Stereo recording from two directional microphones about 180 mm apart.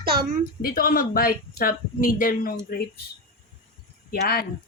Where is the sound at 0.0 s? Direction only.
55° right (ahead or behind).